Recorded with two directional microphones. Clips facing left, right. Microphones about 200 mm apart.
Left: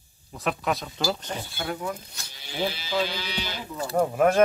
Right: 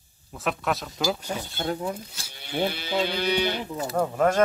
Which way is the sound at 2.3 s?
55° right (ahead or behind).